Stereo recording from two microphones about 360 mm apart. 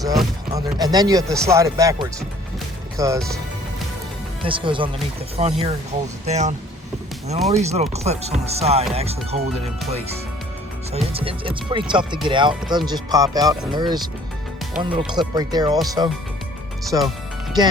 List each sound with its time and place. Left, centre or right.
0.0 s speech: centre
4.4 s speech: centre
7.5 s speech: centre
10.9 s speech: centre
16.9 s speech: centre